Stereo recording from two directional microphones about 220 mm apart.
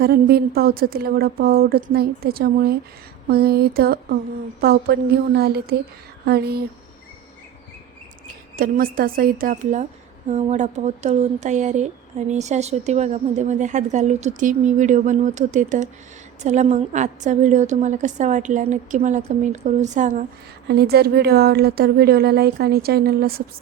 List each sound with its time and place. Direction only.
0.0 s a woman's voice: 45° right (ahead or behind)
8.5 s a woman's voice: 40° right (ahead or behind)
20.7 s a woman's voice: 45° right (ahead or behind)